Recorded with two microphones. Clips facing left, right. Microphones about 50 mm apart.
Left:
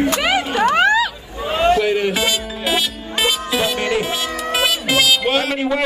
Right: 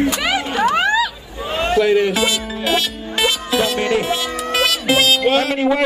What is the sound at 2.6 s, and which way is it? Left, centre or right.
Music, centre.